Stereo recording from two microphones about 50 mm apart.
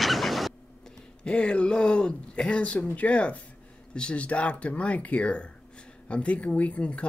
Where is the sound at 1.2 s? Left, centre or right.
Centre.